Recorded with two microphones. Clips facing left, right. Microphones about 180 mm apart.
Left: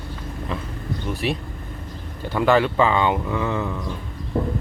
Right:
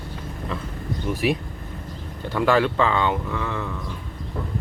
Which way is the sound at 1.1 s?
10° right (ahead or behind).